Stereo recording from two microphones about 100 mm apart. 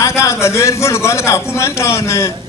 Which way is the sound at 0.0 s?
30° left (ahead or behind).